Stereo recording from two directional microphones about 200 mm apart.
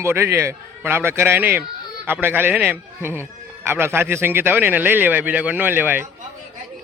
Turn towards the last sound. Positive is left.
turn(degrees=-10)  # may be behind; listen again after turning